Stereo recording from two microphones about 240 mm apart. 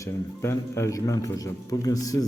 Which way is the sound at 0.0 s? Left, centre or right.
Centre.